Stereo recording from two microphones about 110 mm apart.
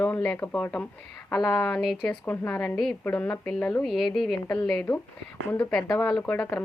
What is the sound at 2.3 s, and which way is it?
A woman's voice, 15° left (ahead or behind).